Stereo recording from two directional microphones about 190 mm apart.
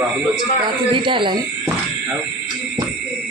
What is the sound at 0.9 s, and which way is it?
Speech, 25° right (ahead or behind).